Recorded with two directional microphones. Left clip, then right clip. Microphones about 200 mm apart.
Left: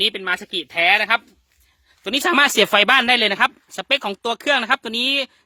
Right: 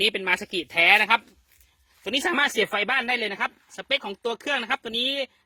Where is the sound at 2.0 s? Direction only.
35° left (ahead or behind).